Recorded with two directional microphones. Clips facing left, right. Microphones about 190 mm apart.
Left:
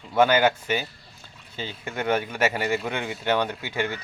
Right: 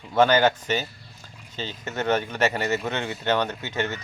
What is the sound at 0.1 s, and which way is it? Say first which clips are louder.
Speech: right 1 dB; 10° left (ahead or behind).